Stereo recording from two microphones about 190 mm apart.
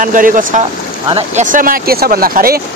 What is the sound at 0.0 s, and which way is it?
Speech, 45° right (ahead or behind).